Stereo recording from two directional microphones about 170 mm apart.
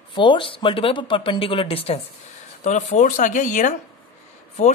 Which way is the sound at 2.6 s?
45° left (ahead or behind).